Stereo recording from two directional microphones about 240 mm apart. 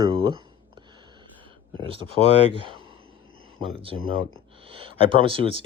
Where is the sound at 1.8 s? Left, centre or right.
Right.